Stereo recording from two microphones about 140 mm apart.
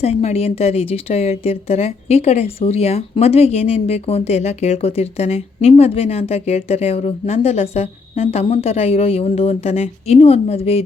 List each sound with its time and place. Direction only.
0.0 s a woman's voice: 50° left (ahead or behind)